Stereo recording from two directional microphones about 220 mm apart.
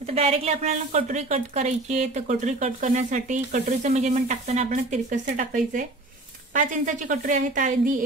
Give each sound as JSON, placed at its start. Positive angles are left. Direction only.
{"t": 0.0, "sound": "a woman's voice", "side_deg": -30}